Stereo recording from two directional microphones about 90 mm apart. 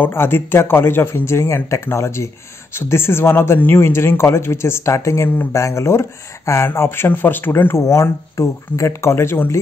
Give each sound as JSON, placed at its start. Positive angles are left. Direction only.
{"t": 0.0, "sound": "speech", "side_deg": 25}